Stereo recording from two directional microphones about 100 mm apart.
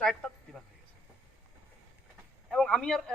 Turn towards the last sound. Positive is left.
turn(degrees=5)  # may be behind; listen again after turning